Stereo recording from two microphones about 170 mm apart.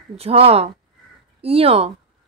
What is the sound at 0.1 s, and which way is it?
Speech, 35° right (ahead or behind).